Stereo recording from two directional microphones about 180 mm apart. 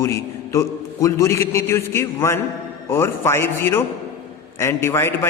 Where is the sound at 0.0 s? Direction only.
15° left (ahead or behind).